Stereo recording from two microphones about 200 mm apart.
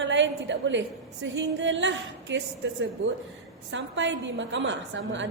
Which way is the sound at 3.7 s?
65° right (ahead or behind).